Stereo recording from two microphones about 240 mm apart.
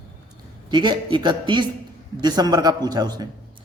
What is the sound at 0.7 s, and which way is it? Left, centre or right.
A man's voice, centre.